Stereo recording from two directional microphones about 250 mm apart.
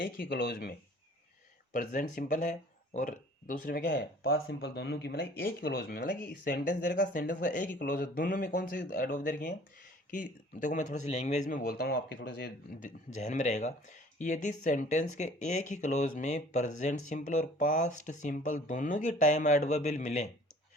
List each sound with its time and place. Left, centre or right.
0.0 s a man's voice: left